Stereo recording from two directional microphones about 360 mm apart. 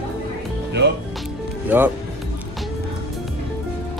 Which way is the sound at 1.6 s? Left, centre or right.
Centre.